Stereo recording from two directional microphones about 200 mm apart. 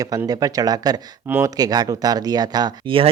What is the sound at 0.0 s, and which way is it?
Speech, 20° right (ahead or behind).